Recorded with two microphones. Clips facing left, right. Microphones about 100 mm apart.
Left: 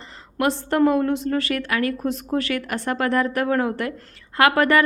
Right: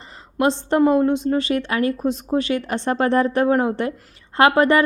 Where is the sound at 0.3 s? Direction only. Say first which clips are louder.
Right 2 dB; 20° right (ahead or behind).